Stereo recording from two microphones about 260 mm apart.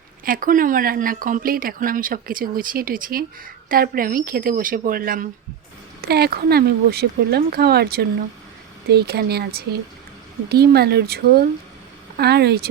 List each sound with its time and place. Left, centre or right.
0.3 s speech: right